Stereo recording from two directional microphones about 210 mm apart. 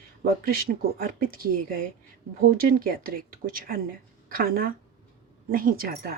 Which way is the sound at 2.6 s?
45° right (ahead or behind).